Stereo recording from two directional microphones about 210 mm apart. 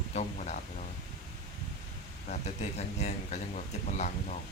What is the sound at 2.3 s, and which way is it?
Speech, 30° left (ahead or behind).